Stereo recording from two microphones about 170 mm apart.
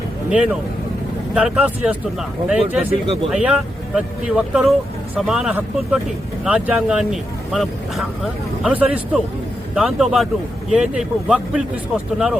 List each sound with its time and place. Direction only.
0.3 s speech: 5° right (ahead or behind)
2.9 s speech: 35° right (ahead or behind)
3.2 s speech: 5° right (ahead or behind)